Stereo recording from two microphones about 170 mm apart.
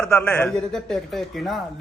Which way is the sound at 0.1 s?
10° left (ahead or behind).